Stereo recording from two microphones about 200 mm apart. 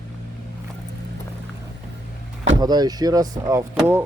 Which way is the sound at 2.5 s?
20° right (ahead or behind).